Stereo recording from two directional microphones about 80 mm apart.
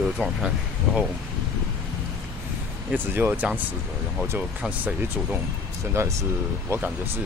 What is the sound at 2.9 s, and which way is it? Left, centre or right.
Speech, right.